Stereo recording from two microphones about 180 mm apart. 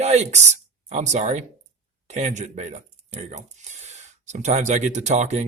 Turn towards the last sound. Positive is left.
turn(degrees=-40)  # may be behind; listen again after turning